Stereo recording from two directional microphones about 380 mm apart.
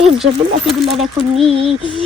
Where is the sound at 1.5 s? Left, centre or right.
Centre.